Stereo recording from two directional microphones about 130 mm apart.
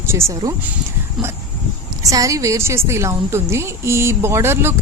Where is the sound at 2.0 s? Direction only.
25° right (ahead or behind).